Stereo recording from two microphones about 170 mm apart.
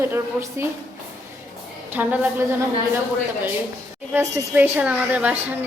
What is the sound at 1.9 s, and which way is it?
Speech, 10° right (ahead or behind).